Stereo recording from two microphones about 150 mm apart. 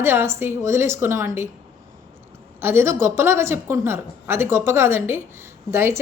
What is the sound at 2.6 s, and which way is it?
A woman's voice, 15° right (ahead or behind).